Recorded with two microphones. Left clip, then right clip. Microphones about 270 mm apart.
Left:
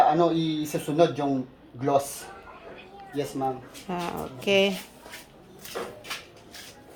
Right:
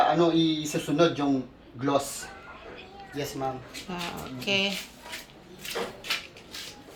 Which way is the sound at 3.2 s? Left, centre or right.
Left.